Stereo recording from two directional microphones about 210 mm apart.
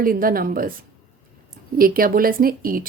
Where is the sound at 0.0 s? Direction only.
40° right (ahead or behind).